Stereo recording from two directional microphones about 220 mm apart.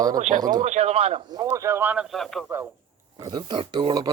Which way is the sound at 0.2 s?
35° right (ahead or behind).